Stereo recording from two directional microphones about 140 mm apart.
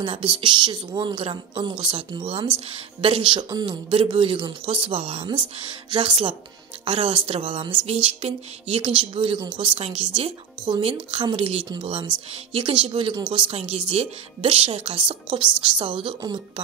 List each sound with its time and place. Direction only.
0.0 s a woman's voice: 40° right (ahead or behind)